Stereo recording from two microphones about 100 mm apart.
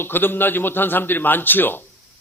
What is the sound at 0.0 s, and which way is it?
Speech, 20° left (ahead or behind).